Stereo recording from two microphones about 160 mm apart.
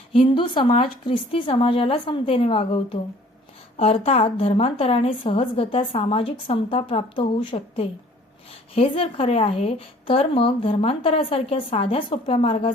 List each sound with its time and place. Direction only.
0.1 s a woman's voice: 30° left (ahead or behind)